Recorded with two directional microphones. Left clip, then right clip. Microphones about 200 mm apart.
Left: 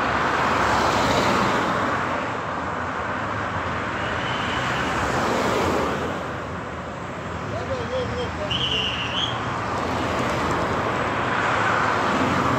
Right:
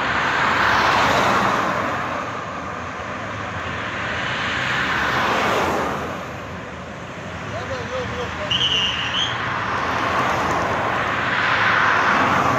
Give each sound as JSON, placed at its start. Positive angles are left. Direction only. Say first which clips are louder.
{"t": 0.2, "sound": "vehicle", "louder": "right 3 dB", "side_deg": 45}
{"t": 4.6, "sound": "vehicle", "louder": "right 3 dB", "side_deg": 45}
{"t": 9.8, "sound": "vehicle", "louder": "right 6 dB", "side_deg": 70}
{"t": 11.2, "sound": "vehicle", "louder": "right 4 dB", "side_deg": 50}